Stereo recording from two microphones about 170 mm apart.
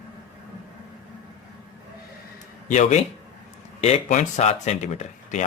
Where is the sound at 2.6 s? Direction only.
45° left (ahead or behind).